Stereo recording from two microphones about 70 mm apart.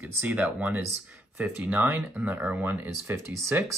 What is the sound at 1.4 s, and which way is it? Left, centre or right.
Speech, right.